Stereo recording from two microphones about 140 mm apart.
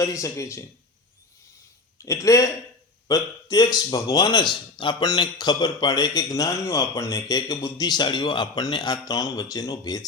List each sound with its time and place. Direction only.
0.0 s speech: 20° left (ahead or behind)
2.0 s speech: 25° left (ahead or behind)